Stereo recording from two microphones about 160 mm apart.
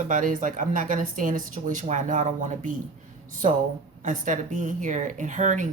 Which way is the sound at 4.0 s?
50° right (ahead or behind).